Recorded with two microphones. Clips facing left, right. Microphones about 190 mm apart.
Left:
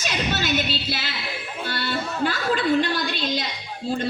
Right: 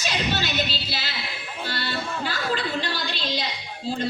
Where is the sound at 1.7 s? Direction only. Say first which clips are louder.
Left 2 dB; 55° left (ahead or behind).